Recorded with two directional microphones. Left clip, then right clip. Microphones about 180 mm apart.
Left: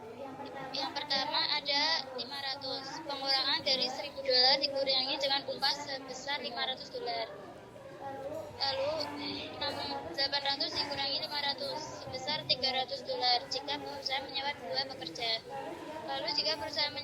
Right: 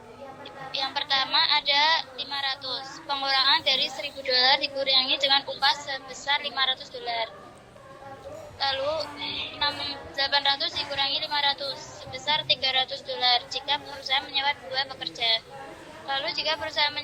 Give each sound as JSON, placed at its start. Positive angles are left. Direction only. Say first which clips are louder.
{"t": 0.7, "sound": "a sound", "louder": "right 9 dB", "side_deg": 5}
{"t": 4.8, "sound": "a woman's voice", "louder": "right 8 dB", "side_deg": 5}
{"t": 8.5, "sound": "speech", "louder": "right 8 dB", "side_deg": 5}
{"t": 8.8, "sound": "speech", "louder": "right 6 dB", "side_deg": -20}
{"t": 9.2, "sound": "a woman's voice", "louder": "right 9 dB", "side_deg": 5}